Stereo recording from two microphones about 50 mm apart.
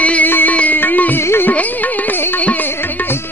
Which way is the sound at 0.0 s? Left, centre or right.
Left.